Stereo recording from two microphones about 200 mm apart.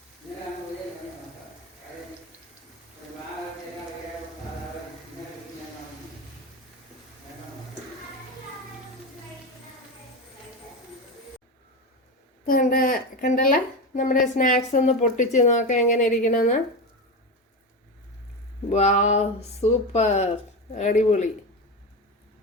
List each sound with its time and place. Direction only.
12.5 s a sound: 45° left (ahead or behind)
14.3 s a woman's voice: 40° left (ahead or behind)
18.7 s a woman's voice: 35° left (ahead or behind)